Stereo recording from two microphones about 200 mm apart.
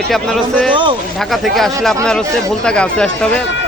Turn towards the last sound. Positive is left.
turn(degrees=5)  # may be behind; listen again after turning